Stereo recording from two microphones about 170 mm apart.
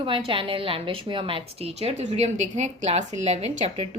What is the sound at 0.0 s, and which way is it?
A woman's voice, 30° right (ahead or behind).